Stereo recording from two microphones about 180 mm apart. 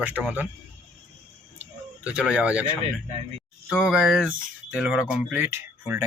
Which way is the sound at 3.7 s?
5° right (ahead or behind).